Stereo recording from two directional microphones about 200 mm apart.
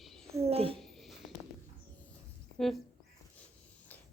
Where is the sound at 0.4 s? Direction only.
30° right (ahead or behind).